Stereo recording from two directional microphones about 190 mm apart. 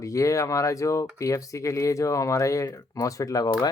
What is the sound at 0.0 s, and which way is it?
Speech, 15° left (ahead or behind).